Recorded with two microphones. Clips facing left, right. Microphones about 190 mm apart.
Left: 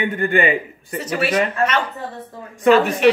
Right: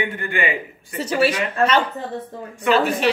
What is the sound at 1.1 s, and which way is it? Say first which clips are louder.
Speech: even; 30° right (ahead or behind).